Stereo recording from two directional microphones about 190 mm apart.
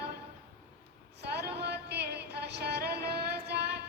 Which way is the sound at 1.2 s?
60° right (ahead or behind).